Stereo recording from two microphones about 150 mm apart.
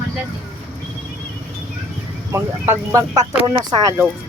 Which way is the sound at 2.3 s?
20° right (ahead or behind).